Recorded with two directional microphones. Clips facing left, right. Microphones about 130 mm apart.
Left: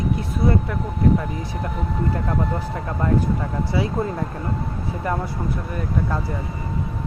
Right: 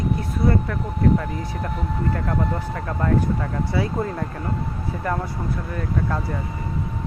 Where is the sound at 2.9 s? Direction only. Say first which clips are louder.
Even; 15° left (ahead or behind).